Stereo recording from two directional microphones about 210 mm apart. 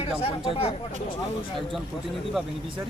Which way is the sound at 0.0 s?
30° left (ahead or behind).